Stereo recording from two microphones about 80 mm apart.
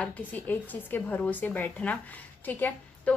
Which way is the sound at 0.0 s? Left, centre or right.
Left.